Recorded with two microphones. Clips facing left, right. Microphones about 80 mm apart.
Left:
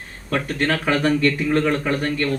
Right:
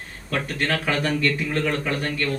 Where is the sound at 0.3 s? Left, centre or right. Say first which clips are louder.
Left 3 dB; left.